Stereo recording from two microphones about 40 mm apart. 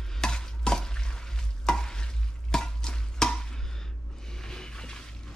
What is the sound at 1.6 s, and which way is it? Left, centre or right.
Stir, centre.